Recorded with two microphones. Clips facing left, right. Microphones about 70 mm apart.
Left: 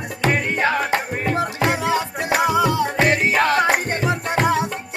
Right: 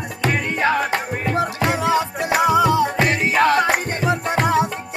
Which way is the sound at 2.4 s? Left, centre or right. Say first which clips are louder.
Right 3 dB; centre.